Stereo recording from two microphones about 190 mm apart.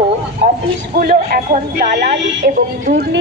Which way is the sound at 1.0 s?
50° right (ahead or behind).